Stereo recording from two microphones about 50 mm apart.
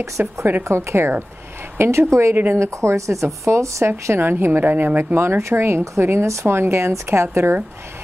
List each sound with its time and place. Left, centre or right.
0.2 s speech: right
0.7 s speech: right
4.2 s speech: right
5.1 s speech: right